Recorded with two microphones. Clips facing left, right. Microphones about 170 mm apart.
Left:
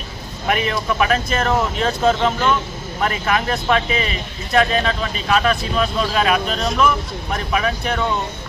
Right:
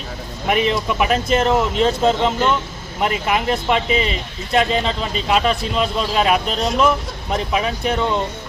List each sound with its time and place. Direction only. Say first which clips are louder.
0.5 s speech: right 2 dB; 20° right (ahead or behind)